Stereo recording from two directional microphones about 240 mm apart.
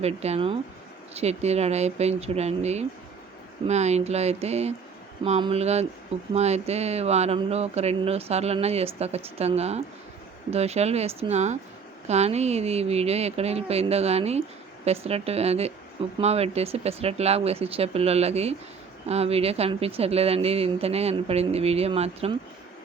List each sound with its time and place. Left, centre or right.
0.0 s speech: right